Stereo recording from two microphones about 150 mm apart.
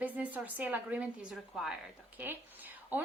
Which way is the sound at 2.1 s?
15° right (ahead or behind).